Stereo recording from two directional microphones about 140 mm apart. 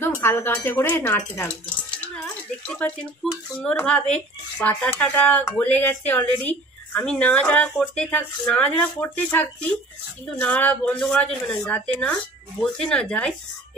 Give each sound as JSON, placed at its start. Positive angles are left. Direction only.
{"t": 0.0, "sound": "speech", "side_deg": 15}
{"t": 2.7, "sound": "speech", "side_deg": 5}